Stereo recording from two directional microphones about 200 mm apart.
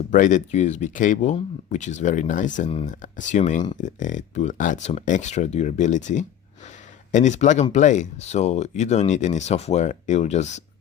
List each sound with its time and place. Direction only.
0.1 s speech: 40° left (ahead or behind)